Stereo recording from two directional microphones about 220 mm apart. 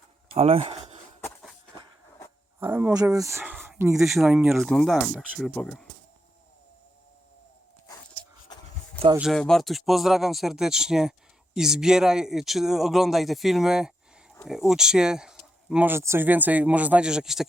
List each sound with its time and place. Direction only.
0.3 s speech: 25° right (ahead or behind)
1.2 s a sound: 5° left (ahead or behind)
2.6 s speech: 10° right (ahead or behind)
9.1 s speech: centre (ahead or behind)